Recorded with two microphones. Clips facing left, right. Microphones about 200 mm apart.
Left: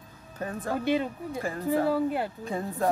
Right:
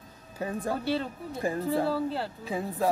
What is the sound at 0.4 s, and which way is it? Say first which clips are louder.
Speech: right 1 dB; 15° right (ahead or behind).